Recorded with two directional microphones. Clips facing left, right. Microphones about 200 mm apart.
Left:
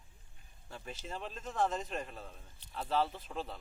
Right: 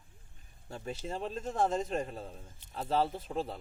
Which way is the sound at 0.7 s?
35° right (ahead or behind).